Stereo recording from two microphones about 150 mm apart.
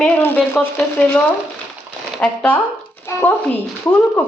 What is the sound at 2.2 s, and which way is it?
Speech, 10° left (ahead or behind).